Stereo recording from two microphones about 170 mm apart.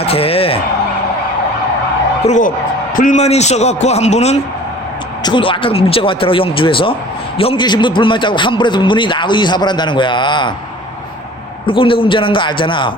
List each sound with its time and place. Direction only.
0.0 s speech: 35° left (ahead or behind)
2.2 s a woman's voice: 45° left (ahead or behind)
5.2 s a man's voice: 30° left (ahead or behind)
11.6 s a man's voice: 30° left (ahead or behind)